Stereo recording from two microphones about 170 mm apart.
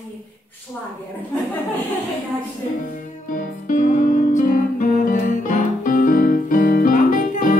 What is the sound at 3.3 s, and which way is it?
Music, 50° left (ahead or behind).